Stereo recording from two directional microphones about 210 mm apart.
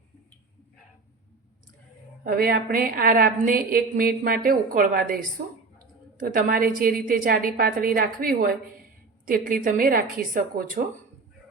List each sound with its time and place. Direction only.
2.2 s a woman's voice: 45° right (ahead or behind)